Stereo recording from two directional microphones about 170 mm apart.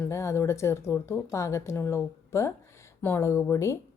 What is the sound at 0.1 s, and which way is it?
A woman's voice, 15° left (ahead or behind).